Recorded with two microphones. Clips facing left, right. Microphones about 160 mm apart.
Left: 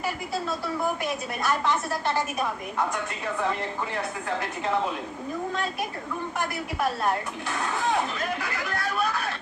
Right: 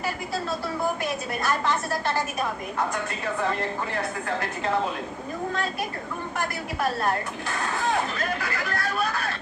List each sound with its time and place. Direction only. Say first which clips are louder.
1.0 s a woman's voice: right 1 dB; 20° left (ahead or behind)
7.5 s speech: even; 20° left (ahead or behind)